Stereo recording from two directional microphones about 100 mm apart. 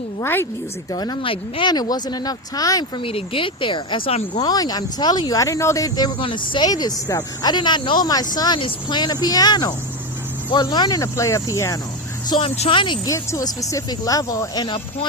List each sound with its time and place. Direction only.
0.2 s a woman's voice: 20° left (ahead or behind)
0.9 s speech: 45° left (ahead or behind)
1.2 s speech: 65° left (ahead or behind)
1.7 s speech: 45° left (ahead or behind)
3.0 s speech: 65° left (ahead or behind)
4.4 s speech: 40° left (ahead or behind)
6.1 s speech: 55° left (ahead or behind)
6.7 s speech: 40° left (ahead or behind)
12.4 s speech: 65° left (ahead or behind)
13.1 s speech: 30° left (ahead or behind)